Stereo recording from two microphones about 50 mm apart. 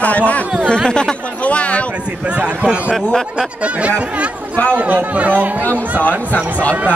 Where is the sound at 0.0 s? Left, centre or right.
Left.